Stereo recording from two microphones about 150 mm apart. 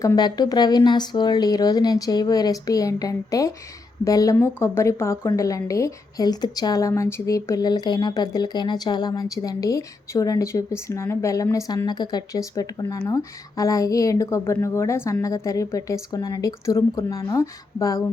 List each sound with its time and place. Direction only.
0.0 s a woman's voice: 25° left (ahead or behind)